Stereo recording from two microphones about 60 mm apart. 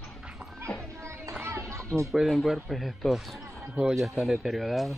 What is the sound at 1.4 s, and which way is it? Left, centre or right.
Music, right.